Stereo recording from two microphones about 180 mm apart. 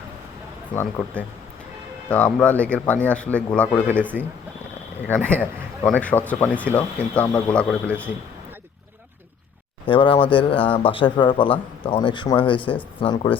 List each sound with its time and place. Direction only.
0.7 s speech: 10° left (ahead or behind)
5.0 s speech: 5° left (ahead or behind)
9.8 s speech: 30° left (ahead or behind)